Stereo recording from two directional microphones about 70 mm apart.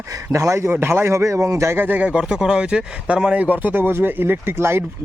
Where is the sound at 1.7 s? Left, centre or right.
Right.